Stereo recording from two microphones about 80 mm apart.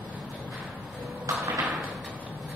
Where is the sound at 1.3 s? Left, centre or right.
Right.